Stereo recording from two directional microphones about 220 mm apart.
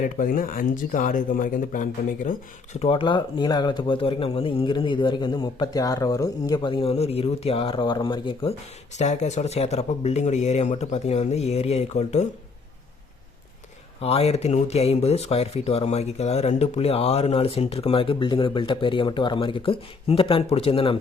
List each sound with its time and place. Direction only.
0.0 s speech: 40° left (ahead or behind)
2.7 s speech: 25° left (ahead or behind)
14.0 s speech: 25° left (ahead or behind)